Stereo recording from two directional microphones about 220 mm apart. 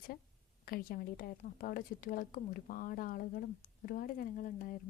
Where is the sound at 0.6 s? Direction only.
40° left (ahead or behind).